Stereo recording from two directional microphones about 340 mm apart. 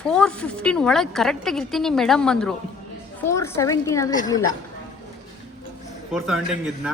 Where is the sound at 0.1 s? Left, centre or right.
Centre.